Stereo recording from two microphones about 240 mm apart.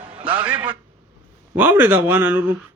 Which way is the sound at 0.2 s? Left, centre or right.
Right.